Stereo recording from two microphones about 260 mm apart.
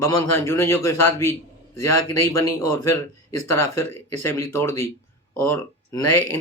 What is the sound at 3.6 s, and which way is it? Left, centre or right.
Speech, left.